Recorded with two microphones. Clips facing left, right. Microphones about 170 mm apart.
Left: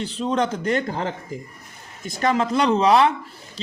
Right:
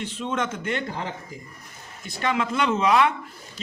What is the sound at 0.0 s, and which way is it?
Speech, 35° left (ahead or behind).